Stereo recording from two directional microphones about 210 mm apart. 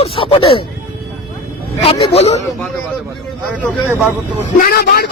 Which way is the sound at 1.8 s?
25° left (ahead or behind).